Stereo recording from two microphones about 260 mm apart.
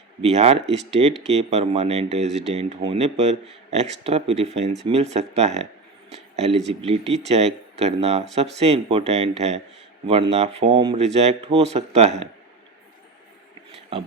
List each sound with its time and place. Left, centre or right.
0.2 s speech: right
6.1 s a sound: right
6.8 s speech: right